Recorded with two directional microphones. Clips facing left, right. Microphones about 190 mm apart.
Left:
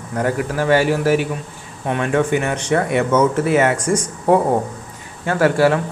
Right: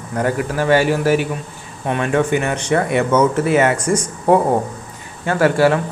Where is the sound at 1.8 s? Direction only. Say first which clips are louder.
Right 1 dB; 5° right (ahead or behind).